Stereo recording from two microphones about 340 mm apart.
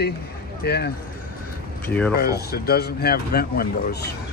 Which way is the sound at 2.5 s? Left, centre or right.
Left.